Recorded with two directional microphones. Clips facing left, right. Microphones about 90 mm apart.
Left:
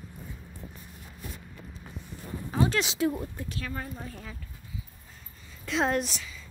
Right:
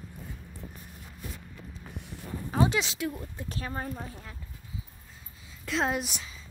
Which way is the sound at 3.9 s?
20° right (ahead or behind).